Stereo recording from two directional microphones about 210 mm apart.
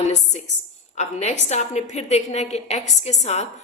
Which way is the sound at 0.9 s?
35° left (ahead or behind).